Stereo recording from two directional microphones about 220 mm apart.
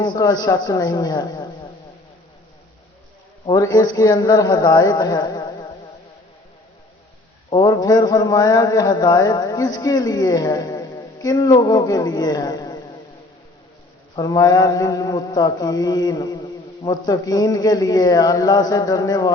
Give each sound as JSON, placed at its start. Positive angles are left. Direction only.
{"t": 0.0, "sound": "speech", "side_deg": 20}
{"t": 3.4, "sound": "speech", "side_deg": 15}
{"t": 7.5, "sound": "speech", "side_deg": 15}
{"t": 14.2, "sound": "speech", "side_deg": 15}